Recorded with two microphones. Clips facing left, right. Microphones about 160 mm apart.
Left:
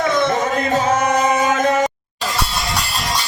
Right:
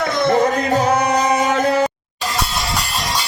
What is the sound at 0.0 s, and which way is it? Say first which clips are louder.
Music: right 2 dB; 35° right (ahead or behind).